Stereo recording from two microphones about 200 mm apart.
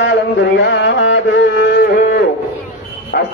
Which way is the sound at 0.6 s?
65° left (ahead or behind).